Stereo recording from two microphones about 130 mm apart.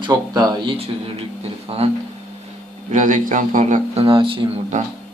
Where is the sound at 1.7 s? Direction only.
50° right (ahead or behind).